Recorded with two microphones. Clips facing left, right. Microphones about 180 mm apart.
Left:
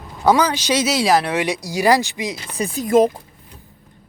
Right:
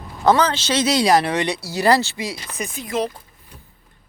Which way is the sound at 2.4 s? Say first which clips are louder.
Left 7 dB; 30° left (ahead or behind).